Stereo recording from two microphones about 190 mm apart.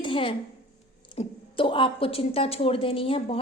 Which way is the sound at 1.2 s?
25° left (ahead or behind).